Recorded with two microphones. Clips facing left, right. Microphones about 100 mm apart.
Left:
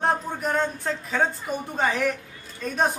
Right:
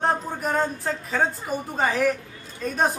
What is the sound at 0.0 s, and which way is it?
Speech, centre (ahead or behind).